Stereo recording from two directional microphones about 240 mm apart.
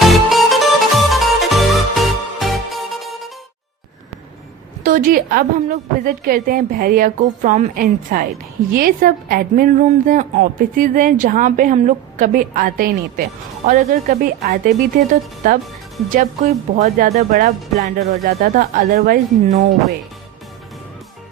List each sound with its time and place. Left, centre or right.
0.0 s music: centre
4.8 s speech: right